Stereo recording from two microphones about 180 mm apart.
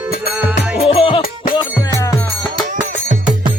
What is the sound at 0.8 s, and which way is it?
Music, 30° left (ahead or behind).